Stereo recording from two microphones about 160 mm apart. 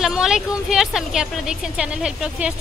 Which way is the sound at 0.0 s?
5° right (ahead or behind).